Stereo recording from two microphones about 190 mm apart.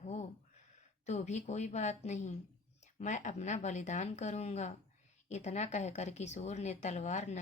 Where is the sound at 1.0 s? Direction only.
35° left (ahead or behind).